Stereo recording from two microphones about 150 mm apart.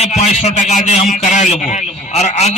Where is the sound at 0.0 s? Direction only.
50° left (ahead or behind).